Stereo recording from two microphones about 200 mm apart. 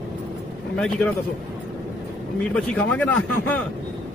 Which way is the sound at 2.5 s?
5° left (ahead or behind).